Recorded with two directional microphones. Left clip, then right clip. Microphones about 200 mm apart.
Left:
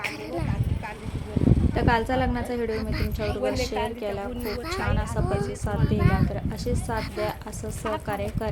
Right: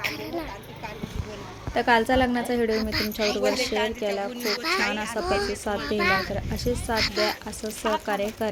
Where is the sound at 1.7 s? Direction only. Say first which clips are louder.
Right 6 dB; 15° right (ahead or behind).